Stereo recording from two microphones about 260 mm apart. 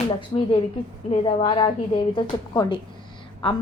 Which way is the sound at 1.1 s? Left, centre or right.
Centre.